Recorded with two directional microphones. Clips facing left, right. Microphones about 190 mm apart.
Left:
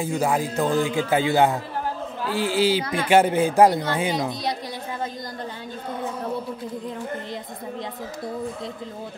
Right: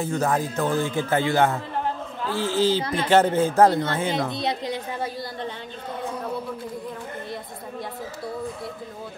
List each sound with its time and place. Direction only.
0.0 s a man's voice: 10° left (ahead or behind)
4.4 s a woman's voice: 25° right (ahead or behind)